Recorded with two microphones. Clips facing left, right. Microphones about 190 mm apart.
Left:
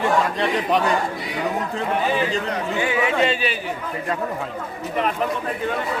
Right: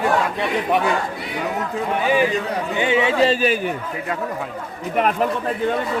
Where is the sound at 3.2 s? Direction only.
40° right (ahead or behind).